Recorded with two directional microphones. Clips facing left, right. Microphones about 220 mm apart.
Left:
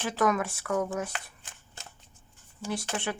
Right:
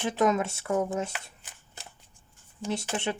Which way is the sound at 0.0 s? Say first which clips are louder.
Right 2 dB; 20° right (ahead or behind).